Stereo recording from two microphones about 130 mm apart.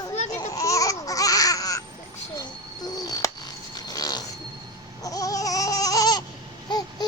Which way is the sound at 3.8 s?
30° left (ahead or behind).